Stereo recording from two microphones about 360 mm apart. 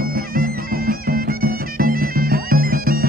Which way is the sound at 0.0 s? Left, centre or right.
Right.